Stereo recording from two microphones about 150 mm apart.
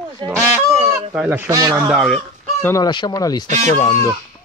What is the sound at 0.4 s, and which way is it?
Fowl, 20° right (ahead or behind).